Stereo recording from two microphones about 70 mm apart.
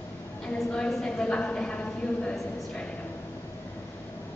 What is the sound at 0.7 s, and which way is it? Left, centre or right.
A woman's voice, centre.